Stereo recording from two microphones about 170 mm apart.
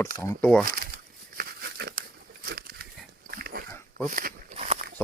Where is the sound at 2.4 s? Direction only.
60° right (ahead or behind).